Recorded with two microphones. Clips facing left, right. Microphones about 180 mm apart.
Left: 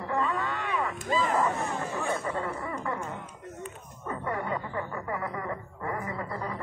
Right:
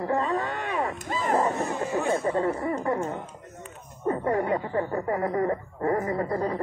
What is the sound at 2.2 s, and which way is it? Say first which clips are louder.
Chuckle: right 7 dB; 35° right (ahead or behind).